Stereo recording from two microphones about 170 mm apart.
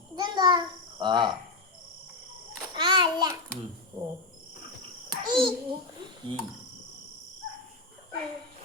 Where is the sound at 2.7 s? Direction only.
25° right (ahead or behind).